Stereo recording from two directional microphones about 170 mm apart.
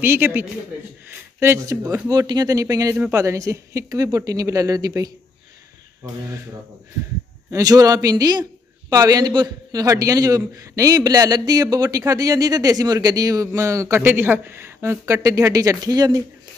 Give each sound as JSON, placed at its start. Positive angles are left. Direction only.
{"t": 0.0, "sound": "a man's voice", "side_deg": -10}
{"t": 7.5, "sound": "a man's voice", "side_deg": -20}